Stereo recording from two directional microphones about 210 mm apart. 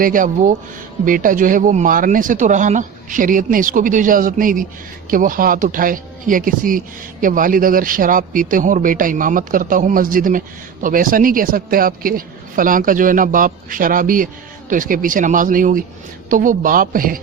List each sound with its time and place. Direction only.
0.0 s speech: 40° right (ahead or behind)